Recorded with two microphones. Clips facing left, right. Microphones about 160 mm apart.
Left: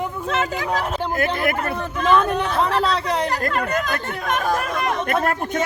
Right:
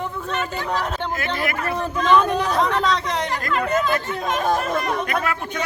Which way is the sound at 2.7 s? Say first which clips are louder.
Even; 35° left (ahead or behind).